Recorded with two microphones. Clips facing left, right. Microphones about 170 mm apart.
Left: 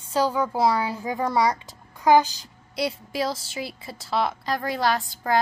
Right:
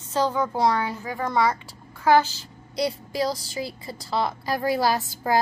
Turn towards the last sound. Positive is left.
turn(degrees=-5)  # may be behind; listen again after turning